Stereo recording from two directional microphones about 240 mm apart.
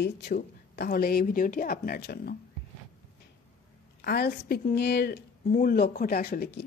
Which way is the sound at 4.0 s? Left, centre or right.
Left.